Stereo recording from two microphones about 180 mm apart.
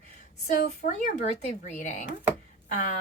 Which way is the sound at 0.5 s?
60° left (ahead or behind).